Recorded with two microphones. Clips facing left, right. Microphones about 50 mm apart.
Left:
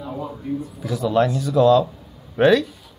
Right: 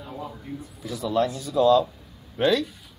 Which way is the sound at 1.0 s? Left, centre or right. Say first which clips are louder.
Left 5 dB; left.